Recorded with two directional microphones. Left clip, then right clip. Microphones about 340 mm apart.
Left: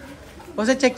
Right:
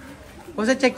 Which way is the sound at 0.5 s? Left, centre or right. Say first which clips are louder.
Left 1 dB; centre.